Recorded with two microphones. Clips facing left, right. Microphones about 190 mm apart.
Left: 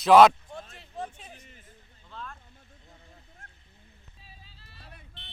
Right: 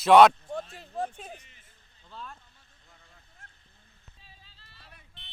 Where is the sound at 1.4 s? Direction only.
45° left (ahead or behind).